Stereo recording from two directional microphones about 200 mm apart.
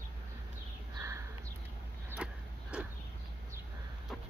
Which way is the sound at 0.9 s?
15° right (ahead or behind).